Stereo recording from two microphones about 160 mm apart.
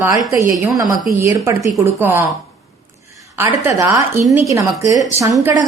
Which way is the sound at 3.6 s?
15° right (ahead or behind).